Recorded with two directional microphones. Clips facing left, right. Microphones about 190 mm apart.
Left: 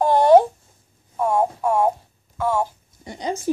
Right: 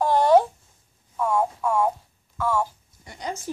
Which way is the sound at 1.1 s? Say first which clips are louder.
Left 3 dB; 30° left (ahead or behind).